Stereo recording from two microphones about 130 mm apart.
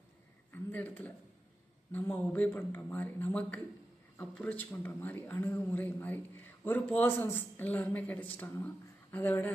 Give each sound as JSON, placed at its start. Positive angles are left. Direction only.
{"t": 0.5, "sound": "a man's voice", "side_deg": 15}